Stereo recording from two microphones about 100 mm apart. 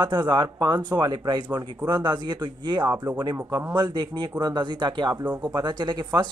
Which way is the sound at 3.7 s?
50° right (ahead or behind).